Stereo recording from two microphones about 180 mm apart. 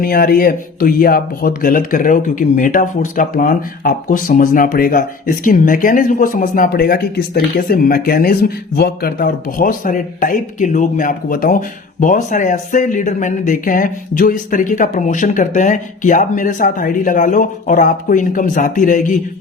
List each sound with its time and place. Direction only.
0.0 s speech: 55° left (ahead or behind)